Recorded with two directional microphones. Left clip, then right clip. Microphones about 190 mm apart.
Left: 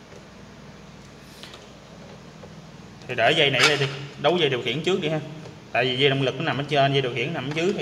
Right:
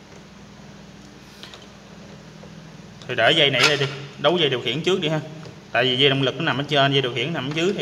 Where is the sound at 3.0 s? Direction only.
10° right (ahead or behind).